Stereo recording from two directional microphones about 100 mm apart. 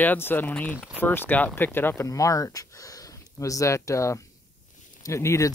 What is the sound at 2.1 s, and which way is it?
Speech, 35° left (ahead or behind).